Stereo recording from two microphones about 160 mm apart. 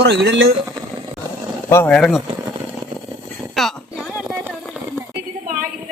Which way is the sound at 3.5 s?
Centre (ahead or behind).